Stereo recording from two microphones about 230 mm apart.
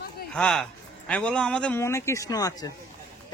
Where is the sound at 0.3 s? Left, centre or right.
Centre.